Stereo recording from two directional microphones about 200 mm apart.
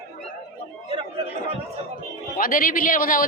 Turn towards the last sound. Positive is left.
turn(degrees=45)  # may be behind; listen again after turning